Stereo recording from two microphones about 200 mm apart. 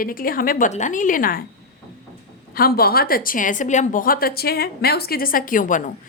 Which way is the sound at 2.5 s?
50° left (ahead or behind).